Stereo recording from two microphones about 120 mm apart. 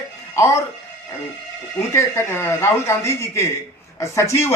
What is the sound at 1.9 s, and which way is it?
Speech, 20° left (ahead or behind).